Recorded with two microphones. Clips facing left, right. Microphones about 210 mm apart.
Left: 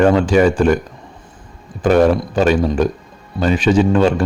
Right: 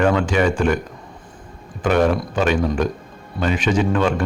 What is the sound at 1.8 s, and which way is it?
Speech, 35° left (ahead or behind).